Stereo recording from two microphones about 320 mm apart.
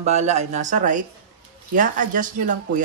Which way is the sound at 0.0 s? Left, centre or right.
Centre.